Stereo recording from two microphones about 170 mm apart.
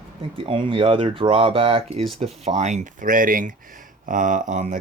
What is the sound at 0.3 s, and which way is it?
Speech, 30° right (ahead or behind).